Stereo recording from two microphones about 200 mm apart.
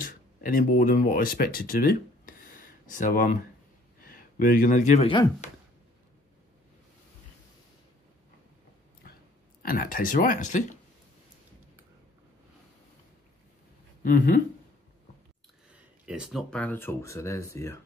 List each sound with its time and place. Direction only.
0.0 s speech: 45° left (ahead or behind)
9.6 s speech: 45° left (ahead or behind)
14.0 s speech: 40° left (ahead or behind)
15.7 s speech: 5° right (ahead or behind); by 17.7 s 15° left (ahead or behind)